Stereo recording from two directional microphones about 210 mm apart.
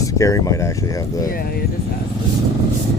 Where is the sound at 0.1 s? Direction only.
15° left (ahead or behind).